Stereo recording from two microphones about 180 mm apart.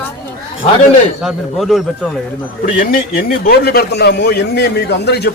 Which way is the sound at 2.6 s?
50° left (ahead or behind).